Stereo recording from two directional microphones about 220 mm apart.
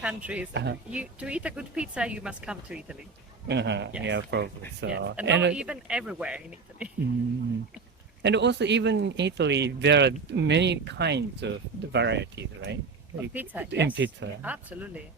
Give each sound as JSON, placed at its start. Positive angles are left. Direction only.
{"t": 0.0, "sound": "a woman's voice", "side_deg": -5}
{"t": 0.5, "sound": "speech", "side_deg": -50}
{"t": 0.9, "sound": "a woman's voice", "side_deg": -5}
{"t": 3.4, "sound": "speech", "side_deg": -50}
{"t": 5.5, "sound": "a woman's voice", "side_deg": -5}
{"t": 8.2, "sound": "speech", "side_deg": -50}
{"t": 13.3, "sound": "speech", "side_deg": -10}
{"t": 13.7, "sound": "speech", "side_deg": -50}
{"t": 14.4, "sound": "speech", "side_deg": -5}